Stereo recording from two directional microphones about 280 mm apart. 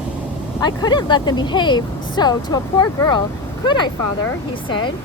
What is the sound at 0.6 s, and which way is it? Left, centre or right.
Speech, centre.